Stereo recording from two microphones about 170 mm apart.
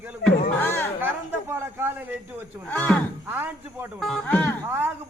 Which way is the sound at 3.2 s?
10° right (ahead or behind).